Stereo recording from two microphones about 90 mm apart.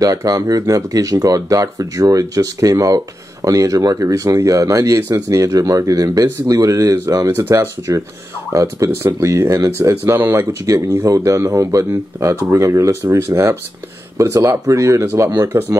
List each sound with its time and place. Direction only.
0.0 s speech: 40° right (ahead or behind)
7.2 s speech: 25° right (ahead or behind)
11.1 s speech: 35° right (ahead or behind)